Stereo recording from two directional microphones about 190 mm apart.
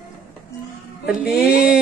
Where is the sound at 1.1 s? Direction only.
5° right (ahead or behind).